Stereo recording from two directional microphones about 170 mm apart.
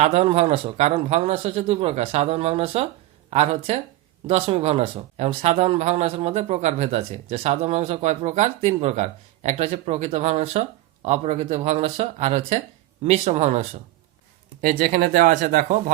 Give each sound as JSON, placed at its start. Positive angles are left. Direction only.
{"t": 0.0, "sound": "speech", "side_deg": -35}